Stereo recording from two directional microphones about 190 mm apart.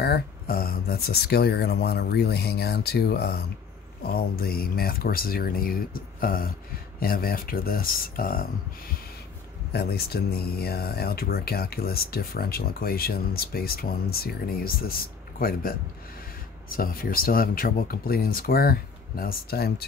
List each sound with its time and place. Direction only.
0.0 s speech: 55° left (ahead or behind)
9.7 s speech: 55° left (ahead or behind)
16.7 s speech: 50° left (ahead or behind)